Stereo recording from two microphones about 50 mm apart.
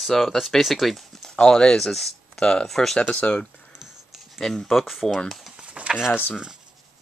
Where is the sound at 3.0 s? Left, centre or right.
Left.